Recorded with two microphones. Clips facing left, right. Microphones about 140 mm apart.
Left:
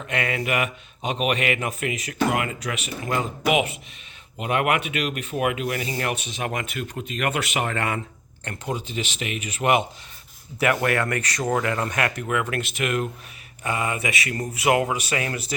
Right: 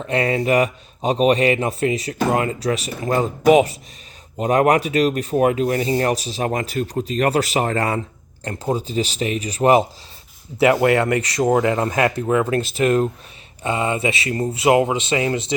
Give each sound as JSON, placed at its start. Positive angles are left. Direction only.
{"t": 0.1, "sound": "speech", "side_deg": -30}
{"t": 10.6, "sound": "speech", "side_deg": -25}